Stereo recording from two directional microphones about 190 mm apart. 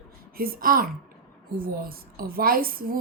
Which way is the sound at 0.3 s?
50° right (ahead or behind).